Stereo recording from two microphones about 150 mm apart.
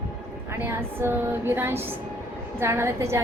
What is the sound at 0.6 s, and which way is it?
A woman's voice, 15° right (ahead or behind).